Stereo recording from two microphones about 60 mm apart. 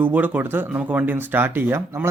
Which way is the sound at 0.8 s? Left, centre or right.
Right.